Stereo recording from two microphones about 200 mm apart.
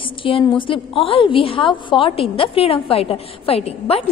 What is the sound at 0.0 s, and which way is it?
A woman's voice, 25° left (ahead or behind).